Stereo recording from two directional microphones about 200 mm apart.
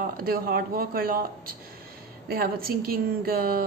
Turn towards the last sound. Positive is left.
turn(degrees=-50)  # may be behind; listen again after turning